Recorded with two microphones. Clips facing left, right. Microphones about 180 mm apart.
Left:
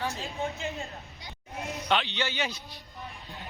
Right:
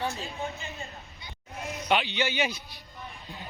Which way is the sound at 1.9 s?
10° right (ahead or behind).